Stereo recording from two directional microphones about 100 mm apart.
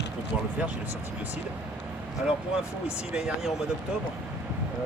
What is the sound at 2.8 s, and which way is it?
Speech, 10° right (ahead or behind).